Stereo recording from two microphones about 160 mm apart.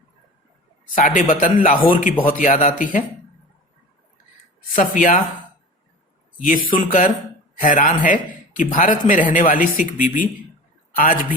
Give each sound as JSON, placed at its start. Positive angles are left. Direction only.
{"t": 0.9, "sound": "a man's voice", "side_deg": 55}
{"t": 4.7, "sound": "a man's voice", "side_deg": 55}
{"t": 6.7, "sound": "a man's voice", "side_deg": 60}